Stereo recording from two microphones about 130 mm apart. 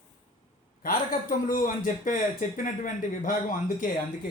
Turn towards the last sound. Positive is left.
turn(degrees=90)